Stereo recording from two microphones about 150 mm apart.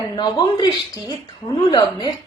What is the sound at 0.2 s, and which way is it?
A woman's voice, 30° left (ahead or behind).